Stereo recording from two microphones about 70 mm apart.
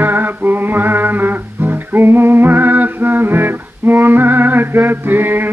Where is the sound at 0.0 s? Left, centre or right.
Right.